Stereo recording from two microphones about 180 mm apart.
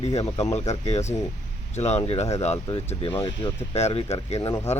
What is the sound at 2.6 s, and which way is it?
Speech, 25° left (ahead or behind).